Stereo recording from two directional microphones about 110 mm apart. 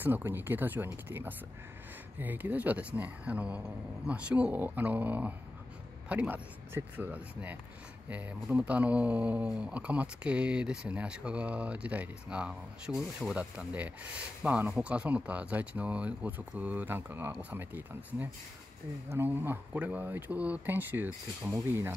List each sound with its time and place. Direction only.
0.0 s speech: 20° right (ahead or behind)